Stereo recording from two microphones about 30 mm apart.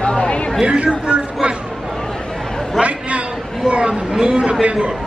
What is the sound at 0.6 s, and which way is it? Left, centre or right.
Speech, right.